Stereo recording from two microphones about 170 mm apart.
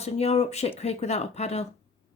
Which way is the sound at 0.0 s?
40° left (ahead or behind).